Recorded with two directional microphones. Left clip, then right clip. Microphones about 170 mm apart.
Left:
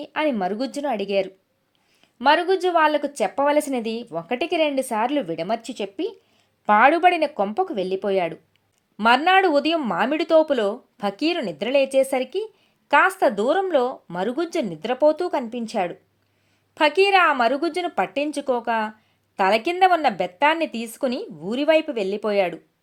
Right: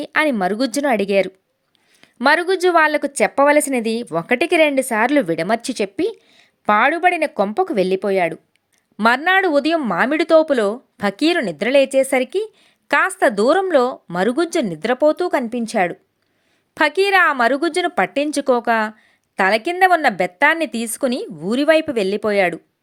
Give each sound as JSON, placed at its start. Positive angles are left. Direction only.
{"t": 0.0, "sound": "a woman's voice", "side_deg": -30}
{"t": 4.0, "sound": "speech", "side_deg": -40}
{"t": 6.9, "sound": "speech", "side_deg": -15}
{"t": 7.3, "sound": "speech", "side_deg": -25}